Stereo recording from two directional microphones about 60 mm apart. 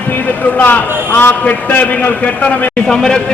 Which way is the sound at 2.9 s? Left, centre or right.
Centre.